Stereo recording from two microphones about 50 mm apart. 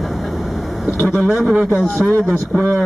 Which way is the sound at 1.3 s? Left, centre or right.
Centre.